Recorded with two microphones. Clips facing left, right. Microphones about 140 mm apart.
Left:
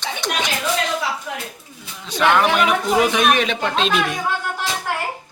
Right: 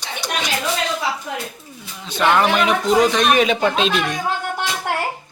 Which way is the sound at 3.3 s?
5° right (ahead or behind).